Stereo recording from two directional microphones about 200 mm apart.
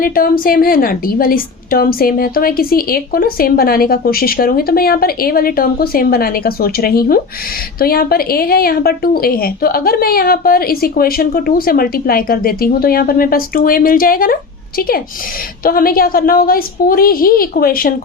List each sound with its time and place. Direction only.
0.0 s a woman's voice: 45° left (ahead or behind)